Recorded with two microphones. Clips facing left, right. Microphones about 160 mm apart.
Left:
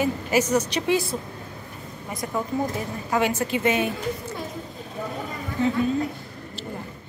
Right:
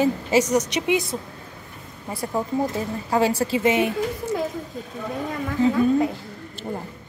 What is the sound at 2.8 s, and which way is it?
A woman's voice, 30° right (ahead or behind).